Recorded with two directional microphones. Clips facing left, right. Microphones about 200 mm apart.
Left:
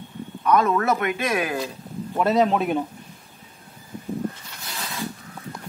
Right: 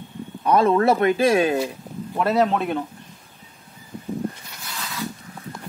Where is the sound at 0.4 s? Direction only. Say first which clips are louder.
Right 3 dB; 30° right (ahead or behind).